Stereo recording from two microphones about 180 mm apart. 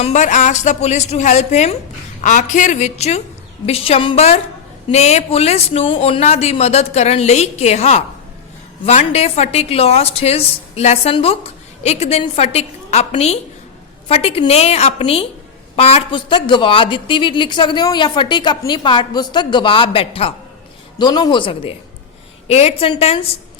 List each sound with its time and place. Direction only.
0.0 s a woman's voice: 40° left (ahead or behind)